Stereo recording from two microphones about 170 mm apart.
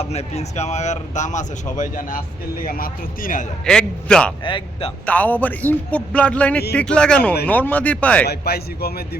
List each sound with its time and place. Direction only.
0.0 s a man's voice: 40° left (ahead or behind); by 3.4 s 55° left (ahead or behind)
3.7 s a man's voice: 5° left (ahead or behind)
4.4 s speech: 30° left (ahead or behind)
5.0 s a man's voice: 10° left (ahead or behind)
8.3 s a man's voice: 65° left (ahead or behind)